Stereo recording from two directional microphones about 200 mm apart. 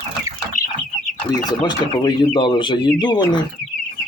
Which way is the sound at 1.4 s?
20° left (ahead or behind).